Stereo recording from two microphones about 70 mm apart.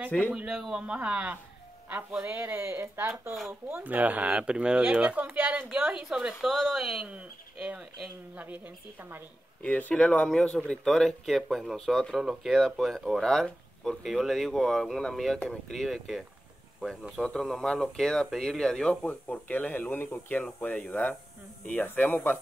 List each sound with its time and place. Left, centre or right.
0.3 s speech: centre
1.9 s speech: right
3.8 s speech: right; by 7.1 s centre
7.1 s speech: centre
9.6 s speech: left